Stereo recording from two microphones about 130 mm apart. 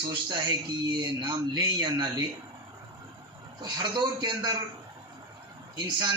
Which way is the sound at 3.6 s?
35° right (ahead or behind).